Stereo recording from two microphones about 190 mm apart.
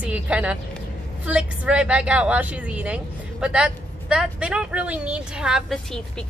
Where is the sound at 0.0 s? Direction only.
5° right (ahead or behind).